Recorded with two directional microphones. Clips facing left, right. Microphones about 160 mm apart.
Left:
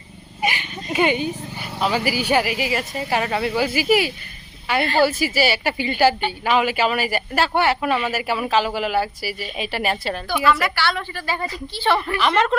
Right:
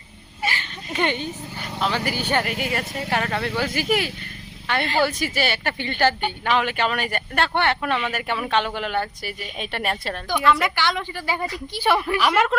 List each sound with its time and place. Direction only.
0.4 s a sound: 15° left (ahead or behind)
0.9 s speech: 10° left (ahead or behind)
10.5 s a woman's voice: 20° right (ahead or behind)